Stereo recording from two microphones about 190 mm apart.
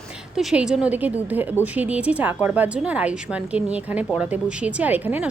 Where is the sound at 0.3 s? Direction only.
Centre (ahead or behind).